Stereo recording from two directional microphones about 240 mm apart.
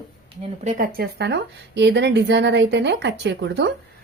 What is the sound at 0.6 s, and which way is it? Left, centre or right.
A woman's voice, right.